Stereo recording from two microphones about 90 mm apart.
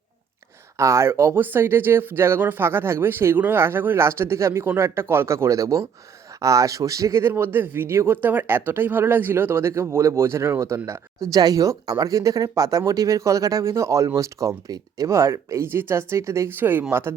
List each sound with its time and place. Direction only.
0.8 s speech: 35° right (ahead or behind)
11.3 s speech: 45° right (ahead or behind); by 16.8 s 20° right (ahead or behind)